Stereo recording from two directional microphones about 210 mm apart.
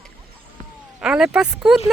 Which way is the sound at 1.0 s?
5° right (ahead or behind).